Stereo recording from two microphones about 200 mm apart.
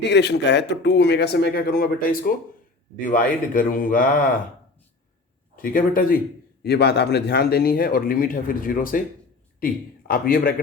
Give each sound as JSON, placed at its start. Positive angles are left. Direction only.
{"t": 0.1, "sound": "a man's voice", "side_deg": 60}
{"t": 5.6, "sound": "a man's voice", "side_deg": 45}
{"t": 10.1, "sound": "a man's voice", "side_deg": 45}